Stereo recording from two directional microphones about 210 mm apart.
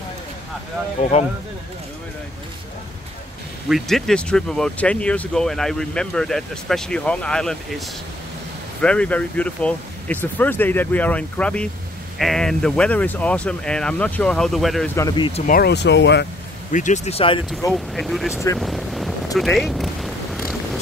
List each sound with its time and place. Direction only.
3.6 s speech: centre (ahead or behind)
8.8 s speech: 5° left (ahead or behind)
15.0 s speech: 20° left (ahead or behind)
15.4 s speech: 45° left (ahead or behind)
16.7 s speech: 35° left (ahead or behind)
17.9 s speech: centre (ahead or behind)
18.3 s speech: 15° left (ahead or behind)
18.6 s boat: centre (ahead or behind)
19.3 s a sound: centre (ahead or behind)